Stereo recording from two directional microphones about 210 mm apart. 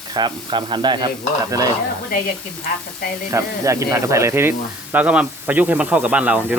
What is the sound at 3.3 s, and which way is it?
Speech, 15° right (ahead or behind).